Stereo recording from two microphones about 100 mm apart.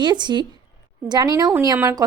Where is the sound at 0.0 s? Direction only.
50° right (ahead or behind).